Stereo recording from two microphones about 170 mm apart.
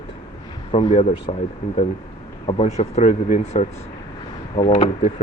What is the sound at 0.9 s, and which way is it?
Speech, 40° left (ahead or behind).